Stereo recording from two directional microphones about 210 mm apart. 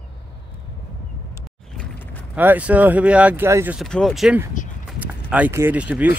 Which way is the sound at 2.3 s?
5° right (ahead or behind).